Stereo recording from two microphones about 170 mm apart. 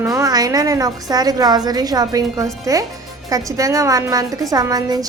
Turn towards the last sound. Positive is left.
turn(degrees=-20)  # may be behind; listen again after turning